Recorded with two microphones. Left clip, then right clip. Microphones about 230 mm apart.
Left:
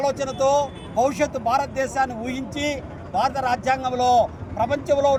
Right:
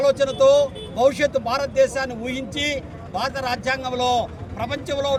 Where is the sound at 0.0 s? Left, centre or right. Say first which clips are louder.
Right 5 dB; centre.